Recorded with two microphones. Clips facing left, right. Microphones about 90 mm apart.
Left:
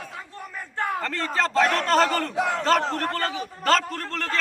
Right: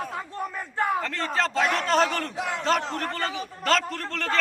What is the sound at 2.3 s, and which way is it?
Battle cry, 35° left (ahead or behind).